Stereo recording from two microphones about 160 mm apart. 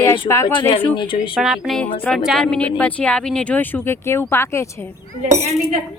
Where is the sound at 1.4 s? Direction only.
Centre (ahead or behind); by 4.6 s 15° left (ahead or behind).